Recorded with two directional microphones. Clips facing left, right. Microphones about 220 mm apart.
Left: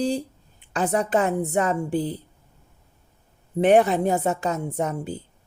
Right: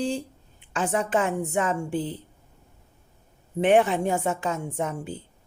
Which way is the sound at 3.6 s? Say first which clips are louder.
Left 3 dB; 40° left (ahead or behind).